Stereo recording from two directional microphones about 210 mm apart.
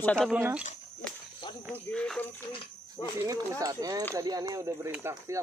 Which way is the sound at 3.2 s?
15° right (ahead or behind).